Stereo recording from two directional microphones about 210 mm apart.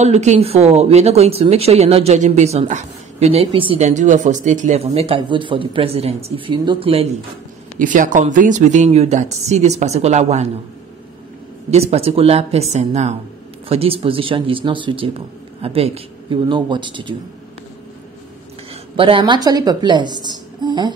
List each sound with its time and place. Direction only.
0.0 s speech: 30° right (ahead or behind)
7.8 s speech: 40° right (ahead or behind)
11.7 s speech: 30° right (ahead or behind)
18.7 s speech: 25° right (ahead or behind)